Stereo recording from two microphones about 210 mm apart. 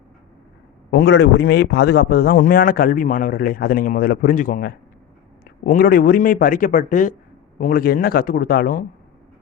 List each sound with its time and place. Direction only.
0.9 s a man's voice: 55° left (ahead or behind)